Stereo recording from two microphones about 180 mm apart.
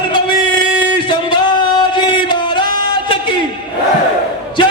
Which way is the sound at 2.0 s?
25° left (ahead or behind).